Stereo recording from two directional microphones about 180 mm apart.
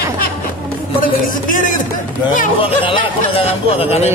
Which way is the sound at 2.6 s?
30° left (ahead or behind).